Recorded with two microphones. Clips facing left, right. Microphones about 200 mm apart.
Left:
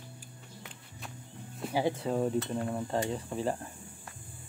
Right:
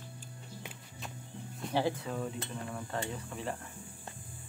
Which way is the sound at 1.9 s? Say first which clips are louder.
Left 8 dB; 35° left (ahead or behind).